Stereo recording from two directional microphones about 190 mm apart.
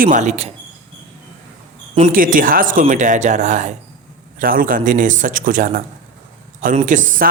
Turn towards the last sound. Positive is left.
turn(degrees=-45)  # may be behind; listen again after turning